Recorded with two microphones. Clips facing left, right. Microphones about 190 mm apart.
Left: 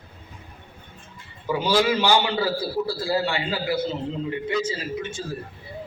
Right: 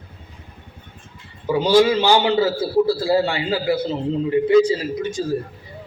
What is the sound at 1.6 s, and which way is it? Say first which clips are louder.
A man's voice: right 6 dB; 25° right (ahead or behind).